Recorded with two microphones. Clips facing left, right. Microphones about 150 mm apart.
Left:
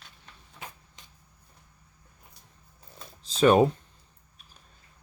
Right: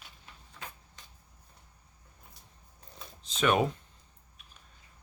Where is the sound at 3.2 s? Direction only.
35° left (ahead or behind).